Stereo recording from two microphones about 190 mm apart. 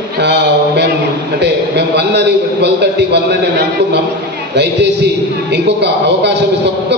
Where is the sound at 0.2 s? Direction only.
60° right (ahead or behind).